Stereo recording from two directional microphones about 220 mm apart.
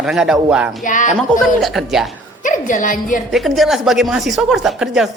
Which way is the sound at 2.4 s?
35° left (ahead or behind).